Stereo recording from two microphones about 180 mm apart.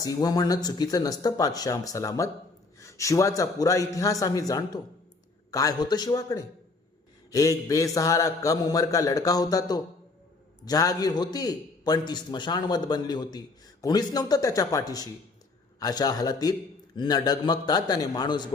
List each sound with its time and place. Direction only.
0.0 s a man's voice: 20° left (ahead or behind)